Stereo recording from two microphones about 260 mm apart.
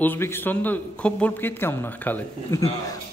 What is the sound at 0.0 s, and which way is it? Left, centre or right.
A man's voice, centre.